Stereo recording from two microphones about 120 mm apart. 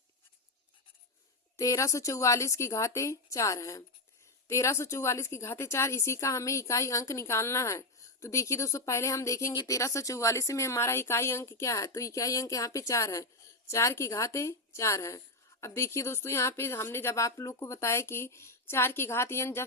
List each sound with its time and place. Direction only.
1.5 s a woman's voice: 25° left (ahead or behind)